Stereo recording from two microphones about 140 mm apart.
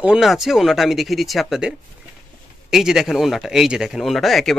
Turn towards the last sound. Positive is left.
turn(degrees=0)  # may be behind; listen again after turning